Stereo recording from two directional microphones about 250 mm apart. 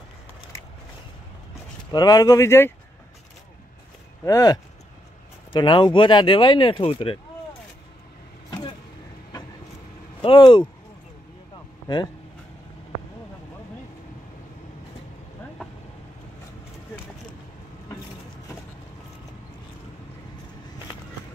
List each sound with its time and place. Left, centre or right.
1.9 s speech: centre
4.2 s speech: centre
10.2 s speech: centre